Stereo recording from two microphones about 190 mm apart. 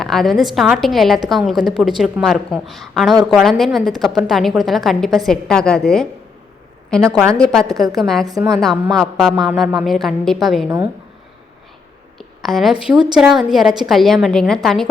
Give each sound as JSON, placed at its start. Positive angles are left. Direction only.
{"t": 0.0, "sound": "a woman's voice", "side_deg": 0}
{"t": 7.0, "sound": "a woman's voice", "side_deg": -15}
{"t": 7.3, "sound": "a woman's voice", "side_deg": 5}
{"t": 12.4, "sound": "a woman's voice", "side_deg": 0}